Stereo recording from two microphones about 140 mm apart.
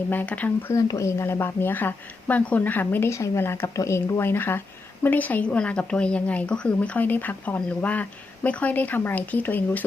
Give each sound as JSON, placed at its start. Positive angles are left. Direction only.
{"t": 0.1, "sound": "a woman's voice", "side_deg": 10}
{"t": 0.7, "sound": "a woman's voice", "side_deg": 25}